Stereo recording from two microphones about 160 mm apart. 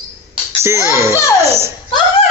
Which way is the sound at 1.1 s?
20° left (ahead or behind).